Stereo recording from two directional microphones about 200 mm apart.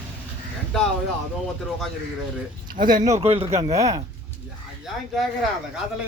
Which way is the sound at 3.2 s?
30° right (ahead or behind).